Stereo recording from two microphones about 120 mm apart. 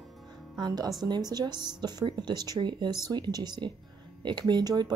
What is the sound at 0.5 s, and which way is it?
Speech, 35° right (ahead or behind).